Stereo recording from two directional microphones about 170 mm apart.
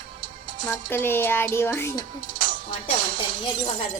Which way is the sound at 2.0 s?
50° right (ahead or behind).